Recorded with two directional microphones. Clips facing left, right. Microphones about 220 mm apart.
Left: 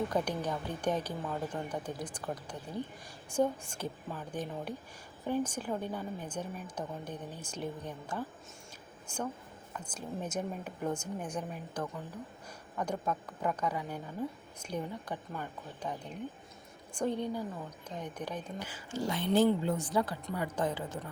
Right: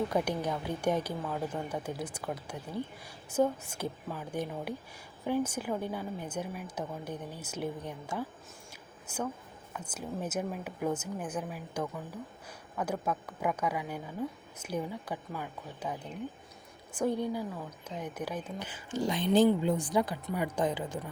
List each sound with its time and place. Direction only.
0.1 s speech: 10° right (ahead or behind)
18.6 s speech: 20° right (ahead or behind)